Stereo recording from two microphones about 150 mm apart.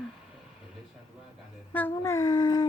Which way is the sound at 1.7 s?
10° left (ahead or behind).